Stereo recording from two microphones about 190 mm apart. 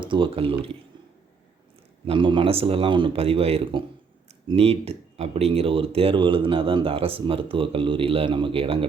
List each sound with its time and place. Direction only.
0.0 s speech: 25° right (ahead or behind)
2.0 s speech: 25° right (ahead or behind)